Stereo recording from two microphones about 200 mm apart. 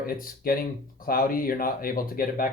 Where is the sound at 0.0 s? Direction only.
45° left (ahead or behind).